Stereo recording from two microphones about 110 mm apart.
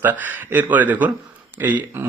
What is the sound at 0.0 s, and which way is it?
Speech, 15° right (ahead or behind).